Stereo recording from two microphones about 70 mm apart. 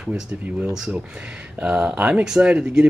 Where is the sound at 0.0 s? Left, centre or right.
Centre.